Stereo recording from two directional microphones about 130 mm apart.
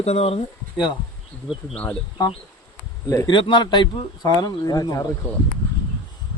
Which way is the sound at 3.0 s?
30° left (ahead or behind).